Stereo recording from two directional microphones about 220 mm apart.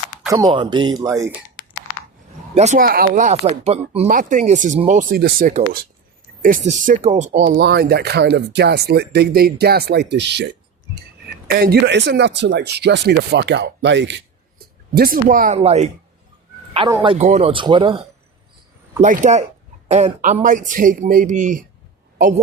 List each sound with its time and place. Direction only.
0.3 s speech: 15° right (ahead or behind)
2.6 s speech: 35° right (ahead or behind)
7.6 s speech: 45° right (ahead or behind)
11.4 s speech: 45° right (ahead or behind)
14.9 s speech: 40° right (ahead or behind); by 18.0 s 20° right (ahead or behind)
19.0 s speech: 35° right (ahead or behind)